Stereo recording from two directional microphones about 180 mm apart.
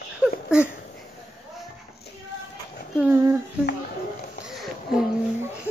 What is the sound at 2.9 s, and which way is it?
Speech, 10° right (ahead or behind).